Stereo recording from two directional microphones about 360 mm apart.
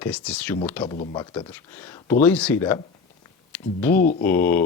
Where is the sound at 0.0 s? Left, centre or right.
Centre.